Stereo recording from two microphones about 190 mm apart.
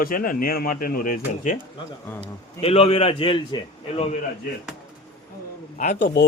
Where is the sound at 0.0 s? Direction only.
50° left (ahead or behind).